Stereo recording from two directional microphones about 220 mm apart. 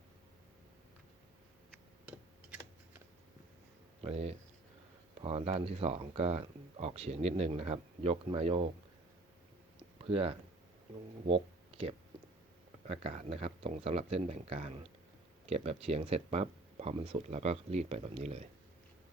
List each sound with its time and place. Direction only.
4.0 s speech: 30° right (ahead or behind)
10.0 s speech: 25° right (ahead or behind)